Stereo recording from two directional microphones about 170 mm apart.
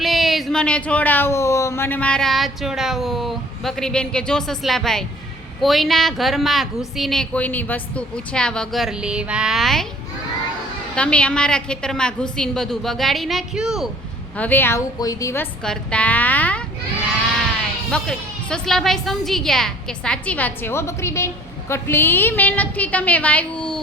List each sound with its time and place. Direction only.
0.0 s speech: centre (ahead or behind)
10.9 s speech: 5° left (ahead or behind)
14.3 s a woman's voice: 10° left (ahead or behind)
15.6 s a woman's voice: 5° left (ahead or behind)
17.9 s a woman's voice: 5° left (ahead or behind)